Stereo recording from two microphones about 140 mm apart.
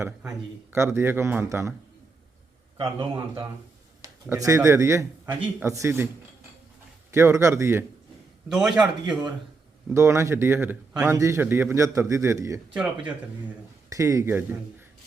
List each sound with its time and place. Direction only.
0.7 s a man's voice: 20° right (ahead or behind)
2.7 s a man's voice: 35° right (ahead or behind)
4.0 s a man's voice: 25° right (ahead or behind)
7.1 s a man's voice: 20° right (ahead or behind)
8.4 s a man's voice: 5° right (ahead or behind)
9.9 s a man's voice: 20° right (ahead or behind)
12.7 s a man's voice: 10° right (ahead or behind)
13.9 s a man's voice: 25° right (ahead or behind)